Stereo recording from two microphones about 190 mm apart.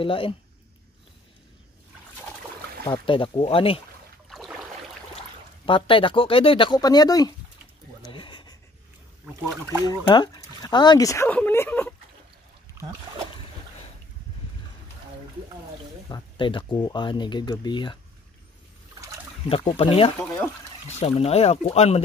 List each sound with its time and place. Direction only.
0.0 s speech: 30° left (ahead or behind)
2.8 s speech: 25° left (ahead or behind)
4.3 s a sound: centre (ahead or behind)
5.7 s speech: 25° left (ahead or behind)
8.0 s a sound: 25° left (ahead or behind)
9.8 s speech: 25° left (ahead or behind)
16.1 s speech: 25° left (ahead or behind)
19.5 s speech: 30° left (ahead or behind)